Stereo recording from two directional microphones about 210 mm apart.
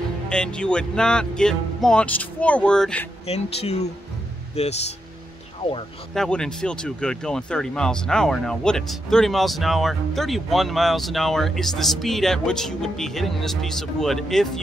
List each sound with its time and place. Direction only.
0.3 s speech: 5° left (ahead or behind)
3.3 s speech: 30° left (ahead or behind)
6.1 s speech: centre (ahead or behind)